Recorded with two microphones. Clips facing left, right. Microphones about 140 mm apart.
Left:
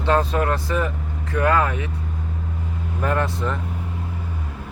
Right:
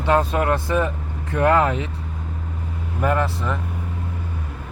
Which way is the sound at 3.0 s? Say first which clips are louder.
Right 1 dB; 5° right (ahead or behind).